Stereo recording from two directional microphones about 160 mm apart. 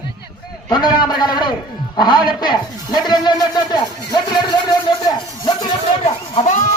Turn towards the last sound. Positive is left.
turn(degrees=45)  # may be behind; listen again after turning